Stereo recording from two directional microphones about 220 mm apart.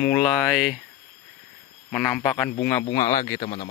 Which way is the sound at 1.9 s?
5° left (ahead or behind).